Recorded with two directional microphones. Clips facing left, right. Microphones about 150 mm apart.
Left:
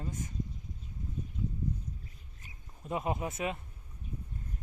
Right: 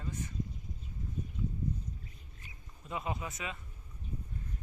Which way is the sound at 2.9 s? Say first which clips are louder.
Left 5 dB; 50° left (ahead or behind).